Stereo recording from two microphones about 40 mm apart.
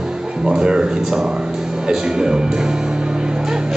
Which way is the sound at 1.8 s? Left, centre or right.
Centre.